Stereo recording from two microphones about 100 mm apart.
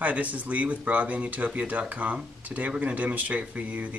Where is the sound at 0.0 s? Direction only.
15° right (ahead or behind).